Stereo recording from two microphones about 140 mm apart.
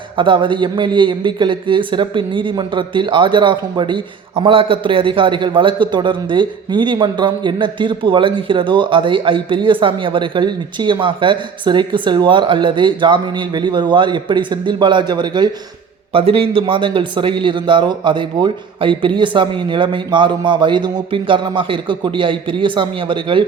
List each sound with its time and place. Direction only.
0.2 s a man's voice: 35° right (ahead or behind)
16.1 s a man's voice: 45° right (ahead or behind)